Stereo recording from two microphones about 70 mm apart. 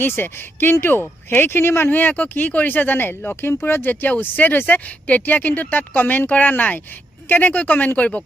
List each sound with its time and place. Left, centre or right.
0.0 s speech: left